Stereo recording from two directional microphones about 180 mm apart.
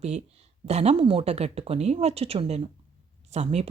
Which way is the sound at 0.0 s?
35° right (ahead or behind).